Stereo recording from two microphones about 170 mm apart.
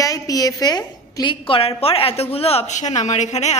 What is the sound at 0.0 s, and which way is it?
A woman's voice, 20° left (ahead or behind).